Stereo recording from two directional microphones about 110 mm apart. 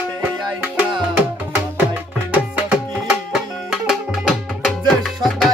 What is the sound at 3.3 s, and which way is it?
Tabla, 5° right (ahead or behind).